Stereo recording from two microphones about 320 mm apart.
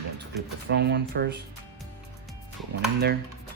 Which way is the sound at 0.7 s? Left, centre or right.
Right.